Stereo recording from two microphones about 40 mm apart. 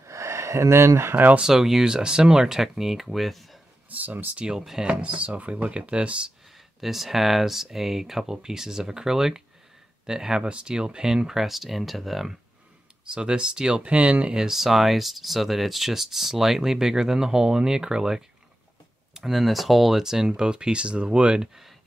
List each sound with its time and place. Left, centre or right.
0.7 s speech: right
1.5 s speech: centre
3.9 s speech: right
4.5 s speech: centre
4.8 s speech: right
6.8 s speech: centre
13.1 s speech: right
13.9 s speech: right
14.3 s speech: centre
20.2 s speech: right
21.4 s speech: centre